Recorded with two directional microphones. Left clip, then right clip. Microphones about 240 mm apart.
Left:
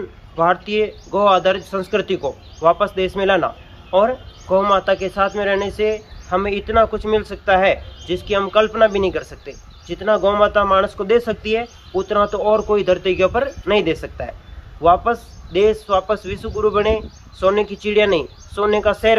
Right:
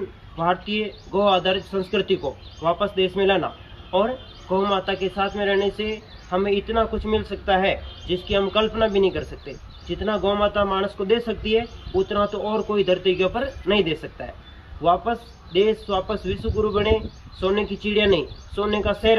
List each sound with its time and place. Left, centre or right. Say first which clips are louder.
0.4 s a man's voice: left 7 dB; centre